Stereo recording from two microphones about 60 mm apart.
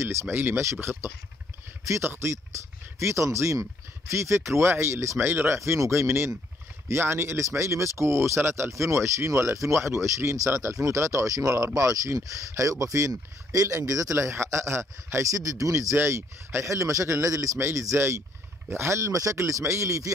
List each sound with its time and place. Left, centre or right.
0.0 s speech: right
4.1 s speech: right
5.6 s speech: right
13.1 s speech: right
14.1 s speech: right
15.2 s speech: right
16.0 s speech: right